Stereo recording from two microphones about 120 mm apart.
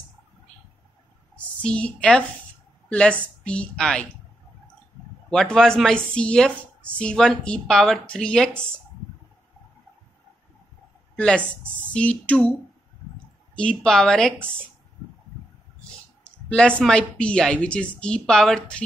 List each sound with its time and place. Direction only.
1.3 s a woman's voice: 10° left (ahead or behind)
5.3 s a woman's voice: 5° left (ahead or behind)
11.1 s a woman's voice: 10° left (ahead or behind)
13.6 s a woman's voice: 5° left (ahead or behind)
16.3 s a sound: 10° left (ahead or behind)
16.8 s a woman's voice: 10° left (ahead or behind)